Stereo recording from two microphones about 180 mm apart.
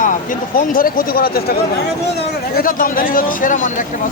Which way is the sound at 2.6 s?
50° left (ahead or behind).